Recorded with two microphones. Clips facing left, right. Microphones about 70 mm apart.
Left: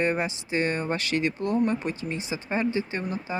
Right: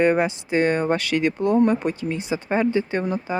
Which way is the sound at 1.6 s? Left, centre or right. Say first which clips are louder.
Right 6 dB; right.